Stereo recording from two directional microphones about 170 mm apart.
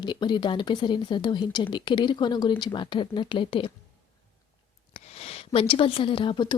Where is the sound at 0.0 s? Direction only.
25° left (ahead or behind).